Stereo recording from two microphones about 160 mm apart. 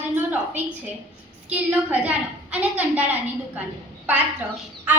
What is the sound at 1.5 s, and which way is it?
A woman's voice, 10° right (ahead or behind).